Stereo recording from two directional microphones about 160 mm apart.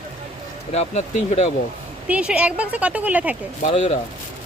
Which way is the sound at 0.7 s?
45° left (ahead or behind).